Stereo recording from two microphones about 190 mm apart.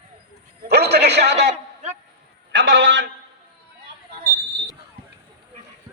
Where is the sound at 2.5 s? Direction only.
75° right (ahead or behind).